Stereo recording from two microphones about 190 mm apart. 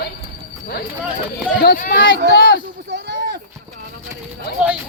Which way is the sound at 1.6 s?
50° left (ahead or behind).